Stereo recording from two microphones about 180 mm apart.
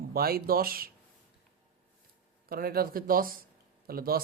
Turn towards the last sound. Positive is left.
turn(degrees=-55)  # may be behind; listen again after turning